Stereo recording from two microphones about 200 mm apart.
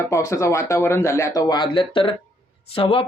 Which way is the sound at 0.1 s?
15° left (ahead or behind).